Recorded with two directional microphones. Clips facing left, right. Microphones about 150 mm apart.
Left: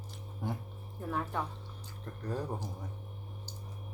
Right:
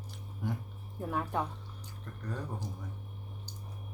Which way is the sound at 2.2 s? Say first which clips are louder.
Left 4 dB; 35° left (ahead or behind).